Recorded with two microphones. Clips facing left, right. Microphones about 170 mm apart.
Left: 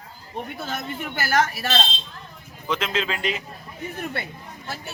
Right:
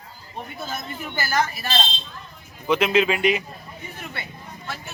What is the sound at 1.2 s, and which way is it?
Speech, 75° left (ahead or behind).